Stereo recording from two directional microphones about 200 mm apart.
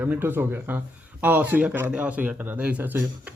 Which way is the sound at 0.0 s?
10° right (ahead or behind).